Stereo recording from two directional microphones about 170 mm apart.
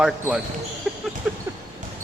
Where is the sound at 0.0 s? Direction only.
5° right (ahead or behind).